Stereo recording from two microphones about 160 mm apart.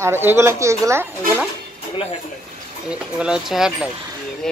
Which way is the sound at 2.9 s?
5° right (ahead or behind).